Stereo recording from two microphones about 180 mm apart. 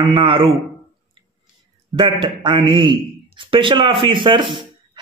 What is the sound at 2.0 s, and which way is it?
A man's voice, 25° right (ahead or behind).